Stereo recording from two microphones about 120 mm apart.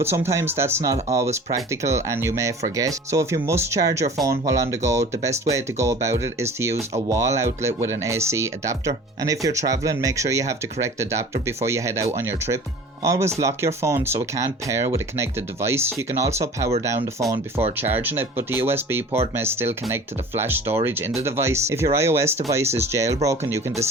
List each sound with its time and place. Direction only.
0.0 s speech: 20° right (ahead or behind)